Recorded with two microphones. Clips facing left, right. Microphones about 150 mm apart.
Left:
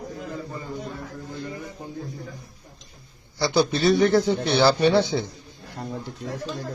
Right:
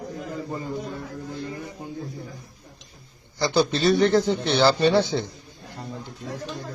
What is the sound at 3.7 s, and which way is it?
Speech, 10° left (ahead or behind).